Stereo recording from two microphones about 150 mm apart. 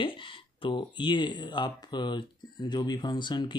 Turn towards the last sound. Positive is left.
turn(degrees=30)  # may be behind; listen again after turning